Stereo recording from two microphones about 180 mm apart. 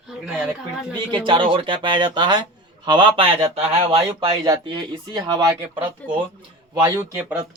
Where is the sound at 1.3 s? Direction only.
25° right (ahead or behind).